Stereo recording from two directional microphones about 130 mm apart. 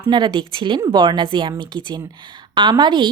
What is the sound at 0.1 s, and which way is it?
A woman's voice, 35° right (ahead or behind).